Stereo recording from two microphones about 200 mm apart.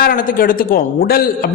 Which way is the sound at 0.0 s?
45° left (ahead or behind).